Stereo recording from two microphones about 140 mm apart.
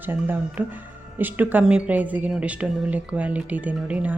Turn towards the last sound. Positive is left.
turn(degrees=-10)  # may be behind; listen again after turning